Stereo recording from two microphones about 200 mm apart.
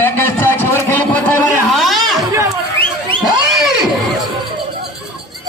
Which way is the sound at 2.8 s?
25° right (ahead or behind).